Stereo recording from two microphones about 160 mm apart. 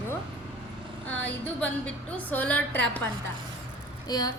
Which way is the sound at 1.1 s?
10° left (ahead or behind).